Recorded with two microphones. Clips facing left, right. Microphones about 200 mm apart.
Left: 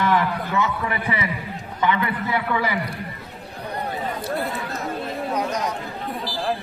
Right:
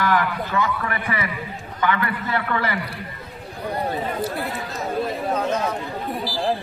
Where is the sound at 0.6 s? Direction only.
20° left (ahead or behind).